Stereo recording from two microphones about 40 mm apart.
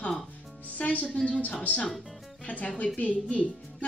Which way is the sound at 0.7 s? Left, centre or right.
Left.